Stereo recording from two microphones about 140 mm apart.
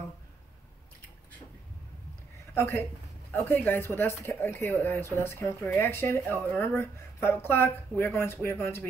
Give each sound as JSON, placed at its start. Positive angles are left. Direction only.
{"t": 2.5, "sound": "a woman's voice", "side_deg": 15}